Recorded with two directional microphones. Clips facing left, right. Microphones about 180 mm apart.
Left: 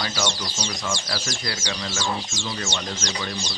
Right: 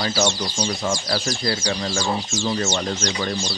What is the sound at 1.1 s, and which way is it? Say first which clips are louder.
Speech: right 7 dB; 35° right (ahead or behind).